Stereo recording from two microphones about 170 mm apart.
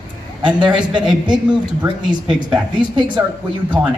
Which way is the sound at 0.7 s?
25° right (ahead or behind).